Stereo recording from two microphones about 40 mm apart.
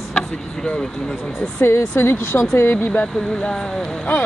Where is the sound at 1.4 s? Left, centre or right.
Left.